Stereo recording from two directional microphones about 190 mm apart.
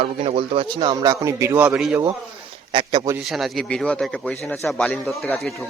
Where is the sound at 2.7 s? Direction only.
25° right (ahead or behind).